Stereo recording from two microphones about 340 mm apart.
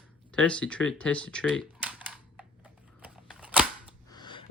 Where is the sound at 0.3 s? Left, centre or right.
Centre.